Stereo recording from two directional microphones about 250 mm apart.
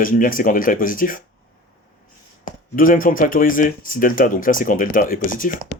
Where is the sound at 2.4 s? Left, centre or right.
Left.